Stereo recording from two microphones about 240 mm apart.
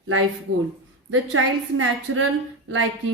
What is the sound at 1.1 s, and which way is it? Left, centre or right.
A woman's voice, right.